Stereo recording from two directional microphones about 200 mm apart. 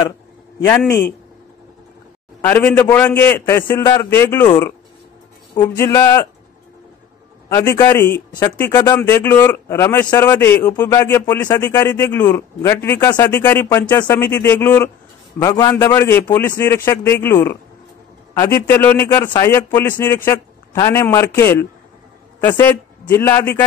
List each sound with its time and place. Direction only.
0.7 s a man's voice: 10° left (ahead or behind)
2.4 s a man's voice: 10° left (ahead or behind)
5.5 s a man's voice: 20° left (ahead or behind)
7.4 s a man's voice: 15° left (ahead or behind)
8.3 s a man's voice: 20° left (ahead or behind)
18.3 s a man's voice: 20° left (ahead or behind)
18.7 s a man's voice: 10° left (ahead or behind)